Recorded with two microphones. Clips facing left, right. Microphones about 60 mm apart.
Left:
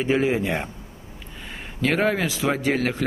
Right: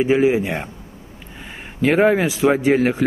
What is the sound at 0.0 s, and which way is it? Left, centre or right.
Speech, centre.